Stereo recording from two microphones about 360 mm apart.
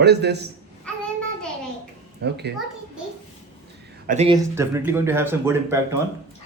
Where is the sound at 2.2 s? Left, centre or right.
Right.